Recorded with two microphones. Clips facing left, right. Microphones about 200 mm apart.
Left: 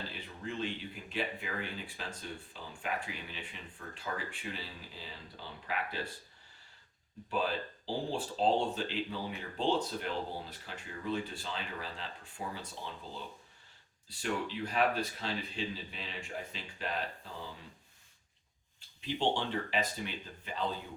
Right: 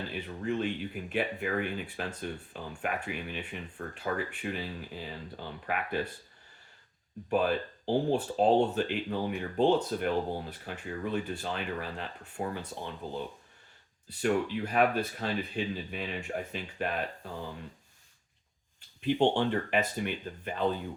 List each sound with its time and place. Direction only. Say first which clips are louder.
0.1 s speech: right 9 dB; 60° right (ahead or behind)
7.3 s speech: right 6 dB; 55° right (ahead or behind)
19.0 s speech: right 7 dB; 55° right (ahead or behind)